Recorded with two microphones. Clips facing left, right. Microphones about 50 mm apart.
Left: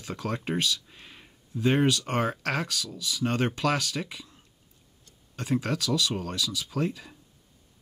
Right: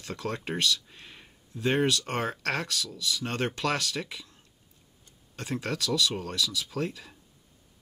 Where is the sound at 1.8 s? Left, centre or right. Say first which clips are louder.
Left 2 dB; left.